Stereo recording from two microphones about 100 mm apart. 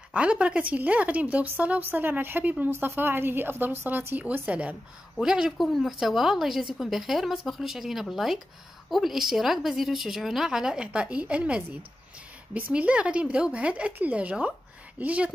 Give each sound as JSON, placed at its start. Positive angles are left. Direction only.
{"t": 0.1, "sound": "a woman's voice", "side_deg": -10}